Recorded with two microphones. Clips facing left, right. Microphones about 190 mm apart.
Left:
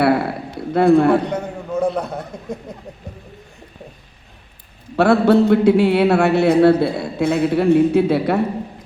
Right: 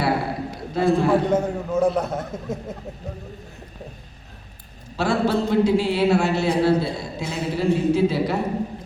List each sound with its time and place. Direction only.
0.0 s a sound: 60° left (ahead or behind)
0.7 s a man's voice: 60° left (ahead or behind)
1.3 s a man's voice: centre (ahead or behind)
4.9 s a man's voice: 60° left (ahead or behind)